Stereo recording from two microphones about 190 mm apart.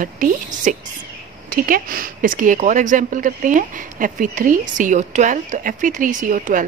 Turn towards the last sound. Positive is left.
turn(degrees=-45)  # may be behind; listen again after turning